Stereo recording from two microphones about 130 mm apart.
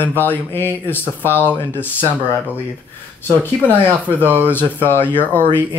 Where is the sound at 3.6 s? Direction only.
15° left (ahead or behind).